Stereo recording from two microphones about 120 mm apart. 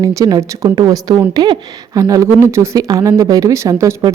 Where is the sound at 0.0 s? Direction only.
30° right (ahead or behind).